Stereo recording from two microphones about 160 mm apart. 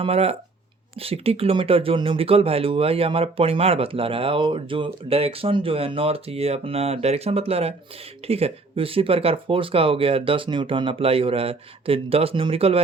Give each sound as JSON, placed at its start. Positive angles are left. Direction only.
{"t": 0.0, "sound": "speech", "side_deg": -40}